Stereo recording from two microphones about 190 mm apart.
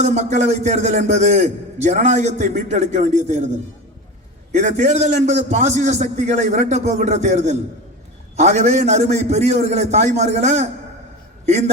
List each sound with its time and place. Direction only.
0.0 s a man's voice: 35° right (ahead or behind)
4.5 s a man's voice: 40° right (ahead or behind)